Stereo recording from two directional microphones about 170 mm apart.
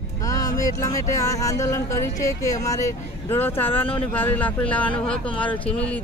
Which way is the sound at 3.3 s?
10° left (ahead or behind).